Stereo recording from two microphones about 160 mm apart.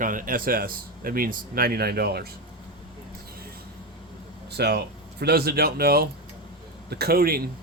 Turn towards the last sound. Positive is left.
turn(degrees=-75)  # may be behind; listen again after turning